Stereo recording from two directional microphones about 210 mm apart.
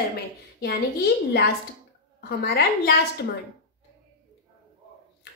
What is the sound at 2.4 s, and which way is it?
Speech, 50° left (ahead or behind).